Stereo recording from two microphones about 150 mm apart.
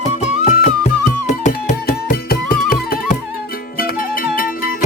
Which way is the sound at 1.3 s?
55° left (ahead or behind).